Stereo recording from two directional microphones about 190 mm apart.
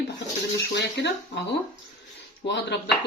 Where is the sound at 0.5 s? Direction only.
65° left (ahead or behind).